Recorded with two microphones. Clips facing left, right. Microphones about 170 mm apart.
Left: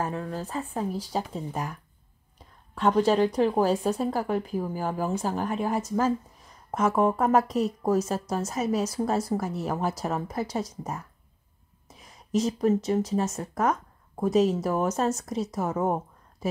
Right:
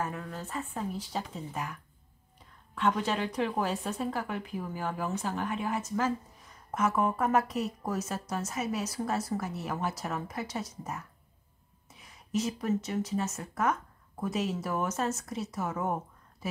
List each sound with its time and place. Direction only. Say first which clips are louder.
0.0 s speech: left 5 dB; 35° left (ahead or behind)